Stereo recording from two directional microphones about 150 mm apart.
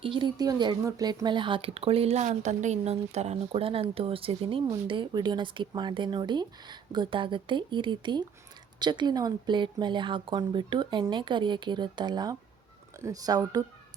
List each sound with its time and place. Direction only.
0.0 s speech: 35° right (ahead or behind)